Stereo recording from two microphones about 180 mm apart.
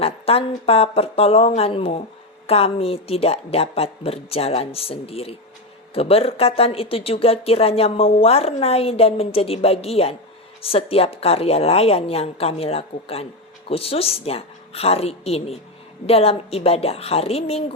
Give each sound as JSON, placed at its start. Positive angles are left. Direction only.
{"t": 0.0, "sound": "speech", "side_deg": 35}